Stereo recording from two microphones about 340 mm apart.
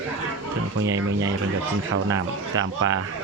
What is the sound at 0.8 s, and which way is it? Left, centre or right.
Speech, centre.